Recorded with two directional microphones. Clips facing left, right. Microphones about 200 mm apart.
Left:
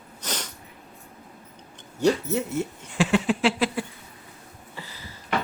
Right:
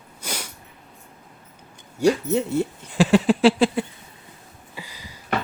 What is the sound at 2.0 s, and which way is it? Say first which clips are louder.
Speech: right 2 dB; 10° right (ahead or behind).